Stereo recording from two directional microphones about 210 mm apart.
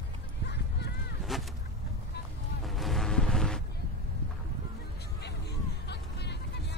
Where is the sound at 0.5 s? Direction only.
50° left (ahead or behind).